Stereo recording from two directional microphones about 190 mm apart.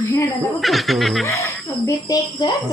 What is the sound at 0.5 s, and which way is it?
Snicker, centre (ahead or behind).